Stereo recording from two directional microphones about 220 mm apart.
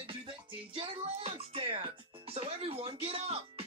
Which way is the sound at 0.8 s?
25° right (ahead or behind).